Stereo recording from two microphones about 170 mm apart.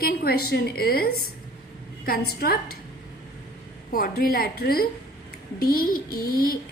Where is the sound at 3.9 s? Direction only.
60° left (ahead or behind).